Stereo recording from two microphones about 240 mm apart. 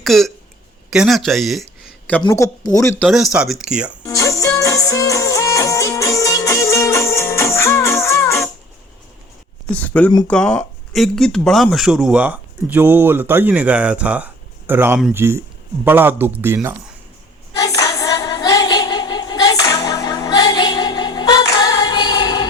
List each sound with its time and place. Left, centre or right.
0.0 s speech: centre
2.2 s speech: centre
3.1 s speech: centre
4.0 s music: centre
9.7 s a man's voice: centre
17.6 s singing: centre